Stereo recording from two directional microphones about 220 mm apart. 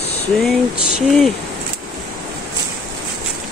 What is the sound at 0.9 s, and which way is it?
Speech, centre (ahead or behind).